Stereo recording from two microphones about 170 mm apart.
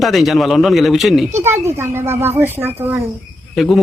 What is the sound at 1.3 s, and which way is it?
A woman's voice, 15° right (ahead or behind).